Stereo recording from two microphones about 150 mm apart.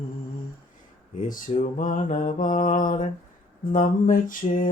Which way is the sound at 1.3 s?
60° left (ahead or behind).